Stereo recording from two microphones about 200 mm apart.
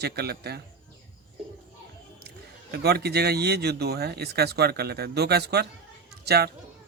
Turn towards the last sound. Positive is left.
turn(degrees=-55)  # may be behind; listen again after turning